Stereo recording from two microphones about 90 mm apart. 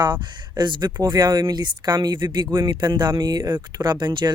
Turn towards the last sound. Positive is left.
turn(degrees=-55)  # may be behind; listen again after turning